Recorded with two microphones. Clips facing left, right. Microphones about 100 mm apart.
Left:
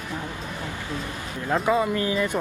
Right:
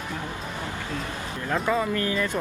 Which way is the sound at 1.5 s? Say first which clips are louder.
Left 3 dB; 5° left (ahead or behind).